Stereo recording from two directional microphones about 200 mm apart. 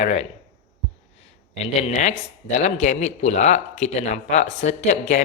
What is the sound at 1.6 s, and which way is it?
Speech, 35° left (ahead or behind).